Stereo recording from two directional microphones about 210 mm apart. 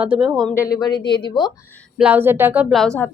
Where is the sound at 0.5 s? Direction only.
15° left (ahead or behind).